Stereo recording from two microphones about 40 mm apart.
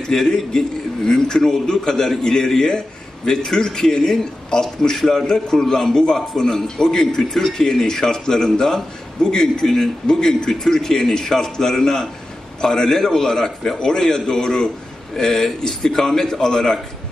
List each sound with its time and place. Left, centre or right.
0.3 s a man's voice: centre
7.2 s a man's voice: centre